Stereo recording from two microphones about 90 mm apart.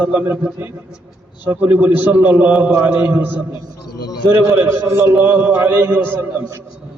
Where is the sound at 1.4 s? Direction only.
20° right (ahead or behind).